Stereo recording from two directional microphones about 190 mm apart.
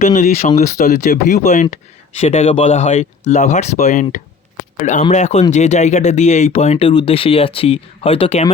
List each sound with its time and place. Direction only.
0.0 s speech: 45° left (ahead or behind)
5.1 s speech: 35° left (ahead or behind)